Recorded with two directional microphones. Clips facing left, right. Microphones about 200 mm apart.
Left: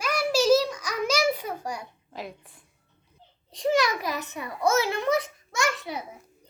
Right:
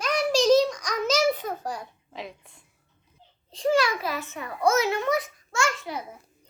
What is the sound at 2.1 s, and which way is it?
Speech, centre (ahead or behind).